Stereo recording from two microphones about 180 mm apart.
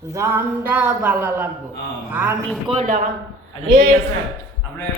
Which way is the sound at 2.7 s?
30° right (ahead or behind).